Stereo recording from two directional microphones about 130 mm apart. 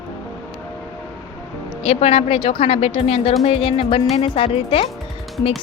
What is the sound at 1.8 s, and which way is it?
A woman's voice, 50° left (ahead or behind).